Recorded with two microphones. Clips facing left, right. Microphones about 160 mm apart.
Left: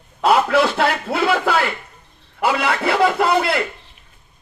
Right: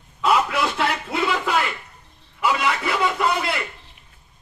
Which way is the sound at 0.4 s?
70° left (ahead or behind).